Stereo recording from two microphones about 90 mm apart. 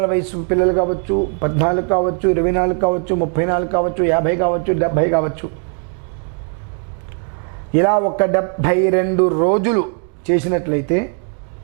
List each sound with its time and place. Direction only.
0.0 s a man's voice: 15° right (ahead or behind)
7.7 s a man's voice: 15° right (ahead or behind)